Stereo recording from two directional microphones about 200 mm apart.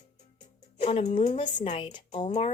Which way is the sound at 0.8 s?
35° left (ahead or behind).